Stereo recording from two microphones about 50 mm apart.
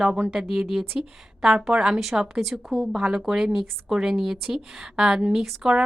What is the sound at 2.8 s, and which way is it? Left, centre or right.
A woman's voice, centre.